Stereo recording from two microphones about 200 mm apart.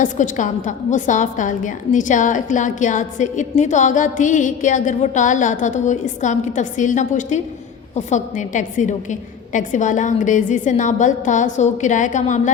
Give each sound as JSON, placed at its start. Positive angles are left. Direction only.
{"t": 0.0, "sound": "a woman's voice", "side_deg": 40}